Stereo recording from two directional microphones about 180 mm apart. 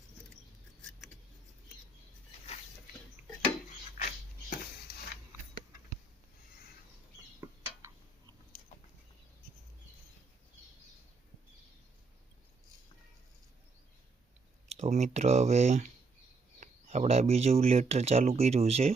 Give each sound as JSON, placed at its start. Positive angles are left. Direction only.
{"t": 3.9, "sound": "dog", "side_deg": 55}
{"t": 14.8, "sound": "speech", "side_deg": -40}